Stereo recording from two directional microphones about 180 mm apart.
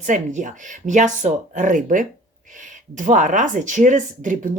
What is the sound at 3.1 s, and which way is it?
Speech, 45° right (ahead or behind).